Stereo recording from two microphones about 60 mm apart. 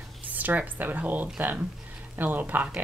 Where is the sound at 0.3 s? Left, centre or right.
Right.